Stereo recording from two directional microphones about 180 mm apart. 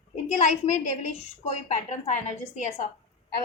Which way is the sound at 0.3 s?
40° left (ahead or behind).